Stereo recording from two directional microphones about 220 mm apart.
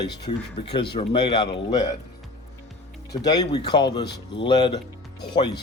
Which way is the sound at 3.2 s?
20° left (ahead or behind).